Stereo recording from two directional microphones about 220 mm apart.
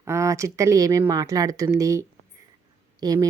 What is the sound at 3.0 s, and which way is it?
Speech, 15° right (ahead or behind).